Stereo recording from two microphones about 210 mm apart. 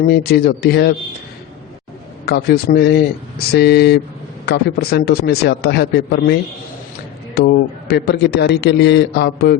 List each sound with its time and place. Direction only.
0.1 s a man's voice: 50° left (ahead or behind)
2.2 s a man's voice: 50° left (ahead or behind)